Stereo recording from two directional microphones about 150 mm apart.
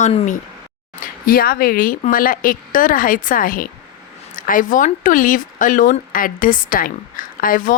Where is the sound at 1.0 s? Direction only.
80° left.